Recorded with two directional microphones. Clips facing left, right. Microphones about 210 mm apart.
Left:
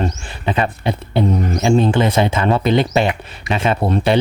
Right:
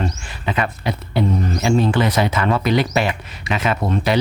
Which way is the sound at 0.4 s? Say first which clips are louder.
Left 3 dB; 30° left (ahead or behind).